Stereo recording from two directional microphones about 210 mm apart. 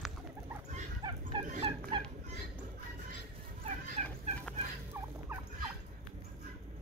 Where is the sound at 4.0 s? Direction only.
35° right (ahead or behind).